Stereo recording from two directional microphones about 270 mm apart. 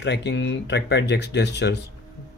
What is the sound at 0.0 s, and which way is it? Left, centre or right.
Speech, left.